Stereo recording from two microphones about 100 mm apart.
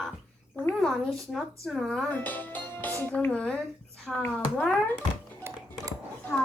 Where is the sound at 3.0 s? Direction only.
15° left (ahead or behind).